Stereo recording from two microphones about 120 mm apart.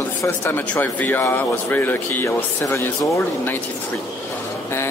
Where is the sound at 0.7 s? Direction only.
15° left (ahead or behind).